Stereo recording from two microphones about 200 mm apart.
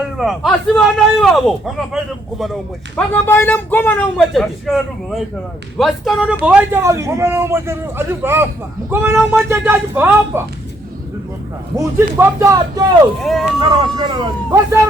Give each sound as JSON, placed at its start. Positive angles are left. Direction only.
{"t": 0.2, "sound": "a man's voice", "side_deg": 0}
{"t": 11.9, "sound": "a man's voice", "side_deg": -15}
{"t": 13.2, "sound": "a man's voice", "side_deg": 0}
{"t": 13.6, "sound": "speech", "side_deg": -20}